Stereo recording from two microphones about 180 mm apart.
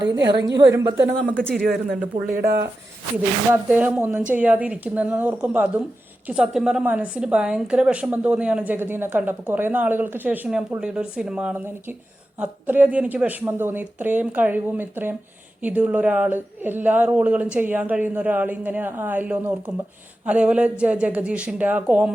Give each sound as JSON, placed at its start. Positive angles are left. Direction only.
{"t": 0.1, "sound": "a woman's voice", "side_deg": -20}
{"t": 1.5, "sound": "speech", "side_deg": 5}
{"t": 2.3, "sound": "speech", "side_deg": -60}
{"t": 3.5, "sound": "a woman's voice", "side_deg": -10}